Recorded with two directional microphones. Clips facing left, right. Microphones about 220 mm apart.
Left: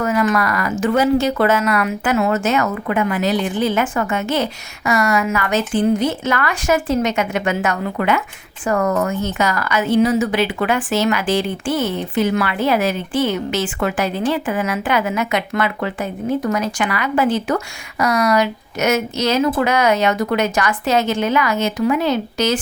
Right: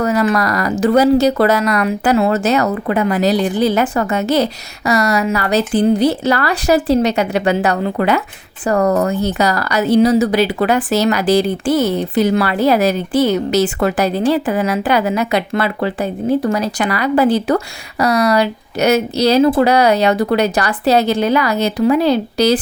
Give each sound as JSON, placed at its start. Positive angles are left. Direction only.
{"t": 0.0, "sound": "a woman's voice", "side_deg": -35}